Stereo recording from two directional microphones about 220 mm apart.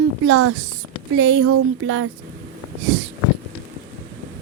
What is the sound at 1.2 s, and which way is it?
Speech, 65° right (ahead or behind).